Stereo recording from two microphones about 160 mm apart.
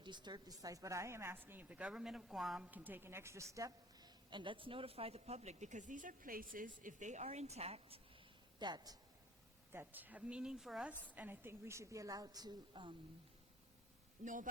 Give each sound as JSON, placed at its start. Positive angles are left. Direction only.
{"t": 0.0, "sound": "a woman's voice", "side_deg": -30}
{"t": 8.5, "sound": "speech", "side_deg": -25}
{"t": 9.7, "sound": "a woman's voice", "side_deg": -10}
{"t": 14.2, "sound": "a man's voice", "side_deg": -50}